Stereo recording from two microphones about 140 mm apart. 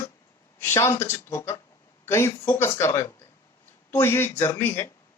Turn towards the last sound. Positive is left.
turn(degrees=15)  # may be behind; listen again after turning